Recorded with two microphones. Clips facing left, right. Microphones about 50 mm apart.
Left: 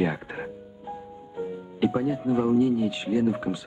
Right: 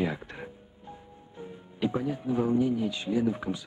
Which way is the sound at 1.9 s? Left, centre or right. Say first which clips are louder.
Left 3 dB; left.